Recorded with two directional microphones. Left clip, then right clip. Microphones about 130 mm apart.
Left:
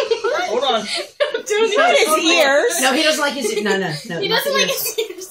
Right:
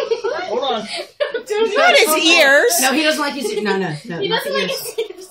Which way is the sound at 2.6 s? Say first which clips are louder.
Right 1 dB; 55° right (ahead or behind).